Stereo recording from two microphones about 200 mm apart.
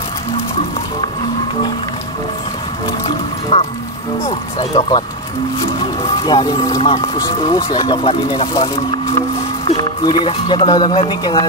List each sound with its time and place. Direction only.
3.5 s speech: 30° left (ahead or behind)
6.2 s speech: 20° left (ahead or behind)
9.7 s speech: 25° left (ahead or behind)